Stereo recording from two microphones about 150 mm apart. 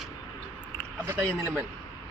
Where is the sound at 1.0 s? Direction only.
15° right (ahead or behind).